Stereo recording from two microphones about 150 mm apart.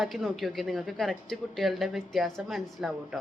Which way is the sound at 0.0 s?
Centre (ahead or behind).